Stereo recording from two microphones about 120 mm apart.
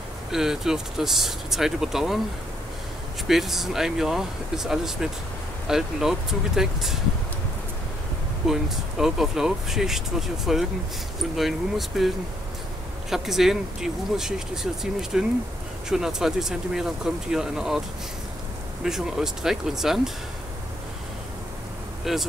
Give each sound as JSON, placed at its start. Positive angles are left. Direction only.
{"t": 0.3, "sound": "speech", "side_deg": -5}
{"t": 3.3, "sound": "speech", "side_deg": 0}
{"t": 8.5, "sound": "speech", "side_deg": -5}
{"t": 13.1, "sound": "speech", "side_deg": -5}
{"t": 18.9, "sound": "speech", "side_deg": -5}
{"t": 22.1, "sound": "speech", "side_deg": -5}